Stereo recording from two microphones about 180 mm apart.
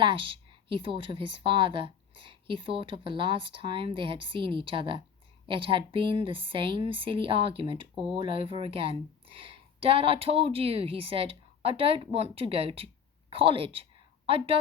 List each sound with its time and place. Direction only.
0.0 s a woman's voice: 30° right (ahead or behind)